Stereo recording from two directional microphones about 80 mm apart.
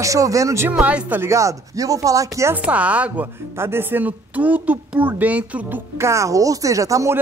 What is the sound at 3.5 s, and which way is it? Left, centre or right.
Speech, right.